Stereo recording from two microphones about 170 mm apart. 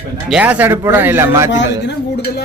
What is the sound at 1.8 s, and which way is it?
Speech, 70° left (ahead or behind).